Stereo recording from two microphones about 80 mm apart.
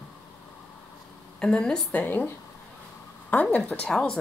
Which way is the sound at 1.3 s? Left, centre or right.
Centre.